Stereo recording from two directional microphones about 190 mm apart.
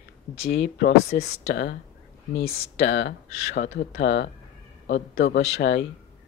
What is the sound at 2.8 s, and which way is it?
Speech, 60° left (ahead or behind).